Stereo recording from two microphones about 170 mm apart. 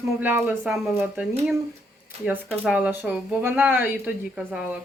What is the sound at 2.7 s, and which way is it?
Speech, 10° right (ahead or behind).